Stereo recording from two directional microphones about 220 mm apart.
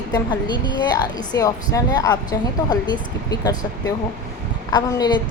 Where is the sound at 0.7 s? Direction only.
20° left (ahead or behind).